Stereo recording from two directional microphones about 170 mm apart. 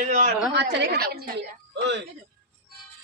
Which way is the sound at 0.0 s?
45° right (ahead or behind).